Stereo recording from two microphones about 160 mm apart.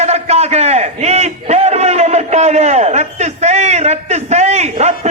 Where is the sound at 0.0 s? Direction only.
40° right (ahead or behind).